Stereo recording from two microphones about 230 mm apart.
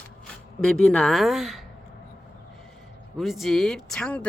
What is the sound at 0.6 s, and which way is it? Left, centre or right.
Speech, centre.